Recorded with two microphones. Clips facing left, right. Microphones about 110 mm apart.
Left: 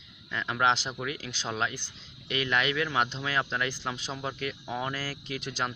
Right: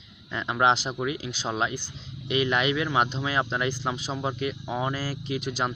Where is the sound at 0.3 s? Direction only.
20° right (ahead or behind).